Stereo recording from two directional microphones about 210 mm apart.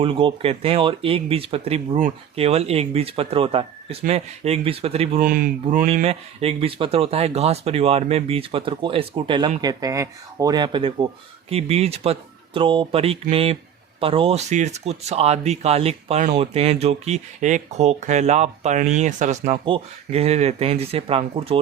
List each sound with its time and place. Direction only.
0.0 s speech: 25° right (ahead or behind)
5.2 s speech: 45° right (ahead or behind)
5.8 s speech: 30° right (ahead or behind)